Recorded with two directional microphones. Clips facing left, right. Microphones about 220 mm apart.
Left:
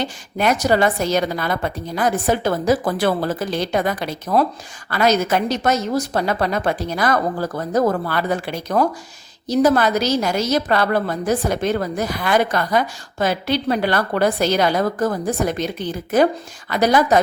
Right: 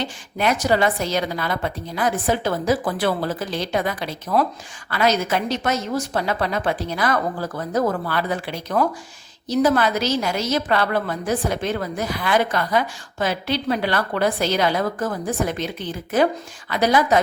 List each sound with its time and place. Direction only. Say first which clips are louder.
0.0 s a woman's voice: left 2 dB; 45° left (ahead or behind)